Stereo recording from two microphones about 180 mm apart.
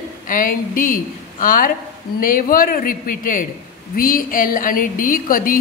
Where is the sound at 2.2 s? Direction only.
50° left (ahead or behind).